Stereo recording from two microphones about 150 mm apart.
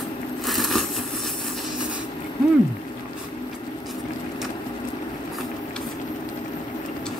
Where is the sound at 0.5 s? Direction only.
Centre (ahead or behind).